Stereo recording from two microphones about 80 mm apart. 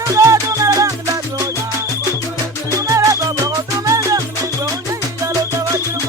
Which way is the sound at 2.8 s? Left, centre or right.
Right.